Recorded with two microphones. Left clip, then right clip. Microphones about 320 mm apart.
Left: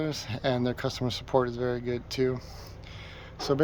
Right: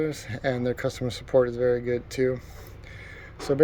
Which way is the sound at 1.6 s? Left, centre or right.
Left.